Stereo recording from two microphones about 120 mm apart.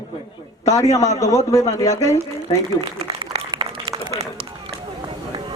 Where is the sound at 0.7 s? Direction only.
30° left (ahead or behind).